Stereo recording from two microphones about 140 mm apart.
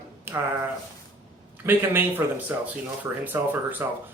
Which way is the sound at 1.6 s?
15° right (ahead or behind).